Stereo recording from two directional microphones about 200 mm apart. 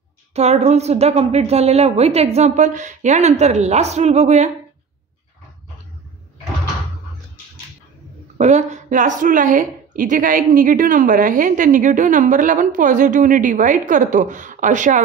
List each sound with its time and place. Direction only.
0.3 s a woman's voice: 30° right (ahead or behind)
8.4 s a woman's voice: 35° right (ahead or behind)